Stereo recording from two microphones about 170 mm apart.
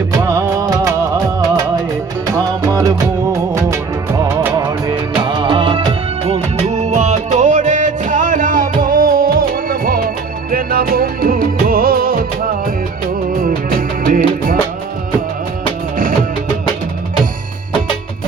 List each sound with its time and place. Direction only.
0.2 s music: 15° right (ahead or behind)
2.3 s music: 20° right (ahead or behind)
5.2 s music: 25° right (ahead or behind); by 14.6 s 55° right (ahead or behind)